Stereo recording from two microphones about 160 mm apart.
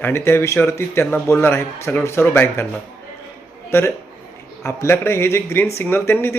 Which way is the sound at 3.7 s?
15° left (ahead or behind).